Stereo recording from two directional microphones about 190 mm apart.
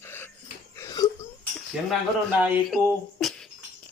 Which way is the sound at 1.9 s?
5° right (ahead or behind).